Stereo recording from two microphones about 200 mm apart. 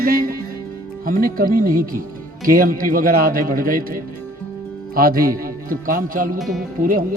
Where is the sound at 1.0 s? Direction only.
45° right (ahead or behind).